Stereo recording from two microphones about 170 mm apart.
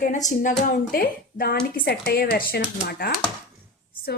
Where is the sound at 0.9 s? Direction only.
60° left (ahead or behind).